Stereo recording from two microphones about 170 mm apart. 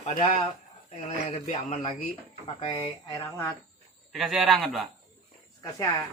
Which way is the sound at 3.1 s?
15° left (ahead or behind).